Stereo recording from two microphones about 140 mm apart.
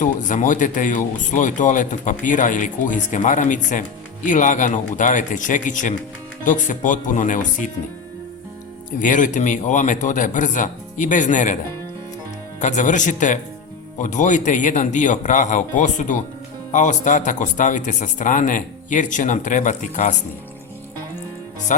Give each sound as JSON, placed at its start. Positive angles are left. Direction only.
{"t": 0.0, "sound": "speech", "side_deg": 65}
{"t": 9.0, "sound": "speech", "side_deg": 65}
{"t": 12.5, "sound": "speech", "side_deg": 60}
{"t": 21.7, "sound": "speech", "side_deg": 65}